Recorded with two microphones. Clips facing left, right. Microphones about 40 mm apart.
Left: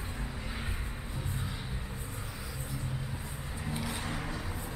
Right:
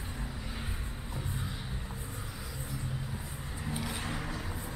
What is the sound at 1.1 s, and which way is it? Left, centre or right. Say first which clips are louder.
Music: right 1 dB; centre.